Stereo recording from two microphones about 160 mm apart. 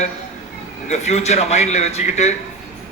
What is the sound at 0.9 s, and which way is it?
A man's voice, 45° left (ahead or behind).